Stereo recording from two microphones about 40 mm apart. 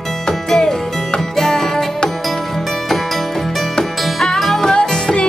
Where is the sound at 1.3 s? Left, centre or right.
Centre.